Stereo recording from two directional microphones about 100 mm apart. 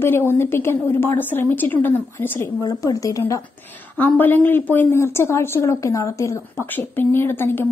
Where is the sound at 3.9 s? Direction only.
20° left (ahead or behind).